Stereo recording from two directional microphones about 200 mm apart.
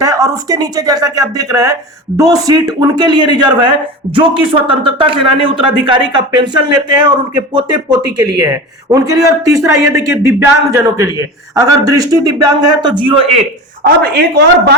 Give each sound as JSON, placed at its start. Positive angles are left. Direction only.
{"t": 0.0, "sound": "a man's voice", "side_deg": -20}
{"t": 13.8, "sound": "speech", "side_deg": -50}